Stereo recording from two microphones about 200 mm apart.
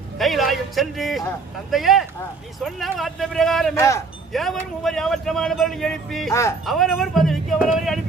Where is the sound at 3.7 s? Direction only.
15° left (ahead or behind).